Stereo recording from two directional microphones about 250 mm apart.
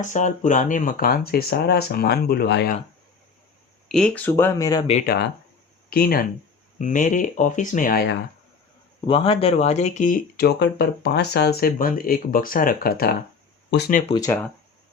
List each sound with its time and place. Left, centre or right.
0.0 s speech: left
3.8 s speech: centre; by 5.0 s left
5.9 s speech: left
9.0 s speech: left
14.3 s speech: centre